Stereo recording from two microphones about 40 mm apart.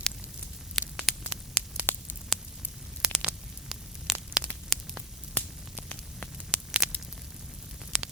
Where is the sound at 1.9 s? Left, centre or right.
Left.